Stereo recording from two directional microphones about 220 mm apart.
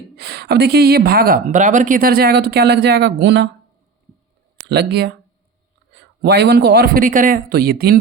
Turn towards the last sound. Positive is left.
turn(degrees=-45)  # may be behind; listen again after turning